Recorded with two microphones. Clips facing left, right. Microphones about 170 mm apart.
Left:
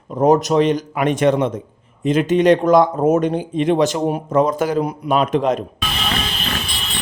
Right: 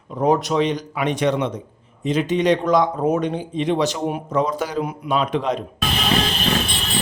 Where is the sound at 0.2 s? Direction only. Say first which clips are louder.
Left 4 dB; 45° left (ahead or behind).